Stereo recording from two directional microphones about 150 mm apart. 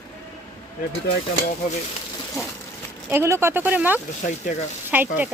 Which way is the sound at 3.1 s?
15° right (ahead or behind).